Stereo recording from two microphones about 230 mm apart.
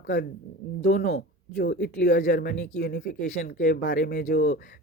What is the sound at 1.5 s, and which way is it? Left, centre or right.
Speech, left.